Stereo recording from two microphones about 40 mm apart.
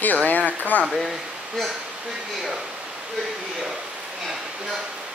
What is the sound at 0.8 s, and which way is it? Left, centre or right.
Speech, centre.